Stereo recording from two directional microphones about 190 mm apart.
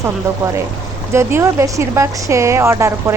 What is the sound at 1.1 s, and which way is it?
A woman's voice, 15° right (ahead or behind).